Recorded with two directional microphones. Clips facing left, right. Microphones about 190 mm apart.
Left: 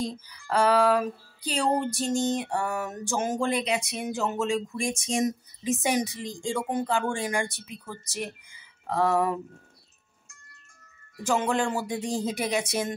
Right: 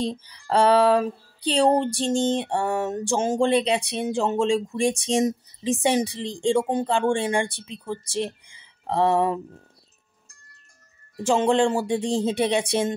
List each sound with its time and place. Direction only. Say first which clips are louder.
0.2 s music: right 4 dB; 30° right (ahead or behind)
11.1 s music: right 6 dB; 30° right (ahead or behind)